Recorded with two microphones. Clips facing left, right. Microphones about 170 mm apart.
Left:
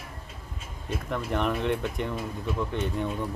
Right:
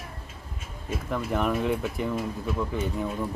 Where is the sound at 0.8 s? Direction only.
5° right (ahead or behind).